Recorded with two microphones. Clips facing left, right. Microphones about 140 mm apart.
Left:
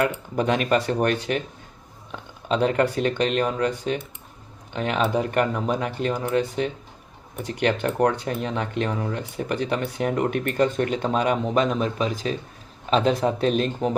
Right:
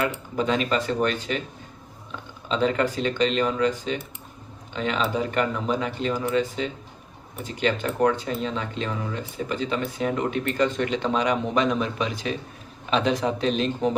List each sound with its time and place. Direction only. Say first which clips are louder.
0.3 s speech: left 2 dB; 55° left (ahead or behind)
2.5 s speech: left 2 dB; 55° left (ahead or behind)